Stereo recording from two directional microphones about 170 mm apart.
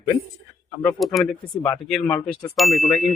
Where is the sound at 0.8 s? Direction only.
Centre (ahead or behind).